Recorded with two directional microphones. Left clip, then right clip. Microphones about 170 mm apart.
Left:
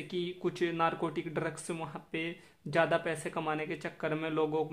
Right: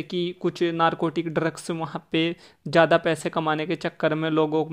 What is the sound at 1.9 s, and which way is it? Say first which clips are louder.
Speech: right 13 dB; 50° right (ahead or behind).